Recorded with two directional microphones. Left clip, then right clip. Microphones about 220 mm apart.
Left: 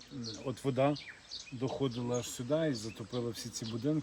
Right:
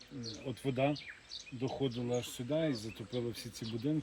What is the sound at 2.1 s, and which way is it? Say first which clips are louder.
Speech: left 3 dB; 10° left (ahead or behind).